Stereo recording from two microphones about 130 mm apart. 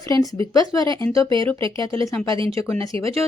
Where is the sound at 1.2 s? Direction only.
40° right (ahead or behind).